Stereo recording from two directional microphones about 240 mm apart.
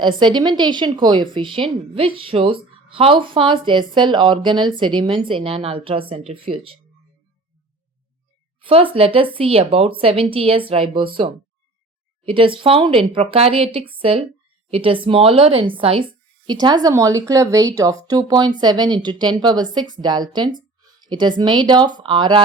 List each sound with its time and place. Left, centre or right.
0.0 s a woman's voice: centre
8.6 s a woman's voice: right